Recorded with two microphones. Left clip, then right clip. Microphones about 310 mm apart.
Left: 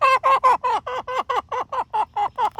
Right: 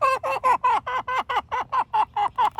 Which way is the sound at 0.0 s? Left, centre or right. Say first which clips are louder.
Left 6 dB; centre.